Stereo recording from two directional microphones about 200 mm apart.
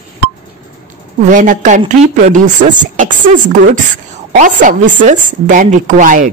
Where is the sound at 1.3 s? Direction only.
40° right (ahead or behind).